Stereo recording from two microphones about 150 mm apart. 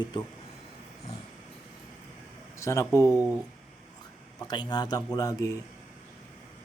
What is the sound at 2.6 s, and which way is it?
Speech, 20° left (ahead or behind).